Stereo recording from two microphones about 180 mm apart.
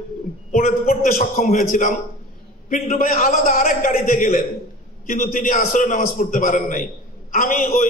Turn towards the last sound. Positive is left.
turn(degrees=45)  # may be behind; listen again after turning